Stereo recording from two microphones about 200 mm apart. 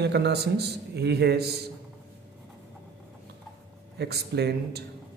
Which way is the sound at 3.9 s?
55° right (ahead or behind).